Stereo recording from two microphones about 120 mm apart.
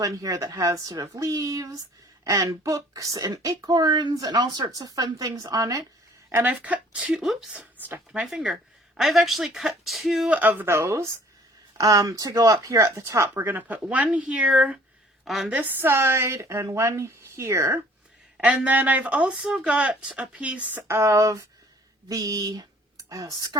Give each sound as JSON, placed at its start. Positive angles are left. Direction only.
{"t": 0.0, "sound": "speech", "side_deg": -30}
{"t": 6.3, "sound": "a woman's voice", "side_deg": -15}
{"t": 15.5, "sound": "speech", "side_deg": -15}
{"t": 18.3, "sound": "speech", "side_deg": -10}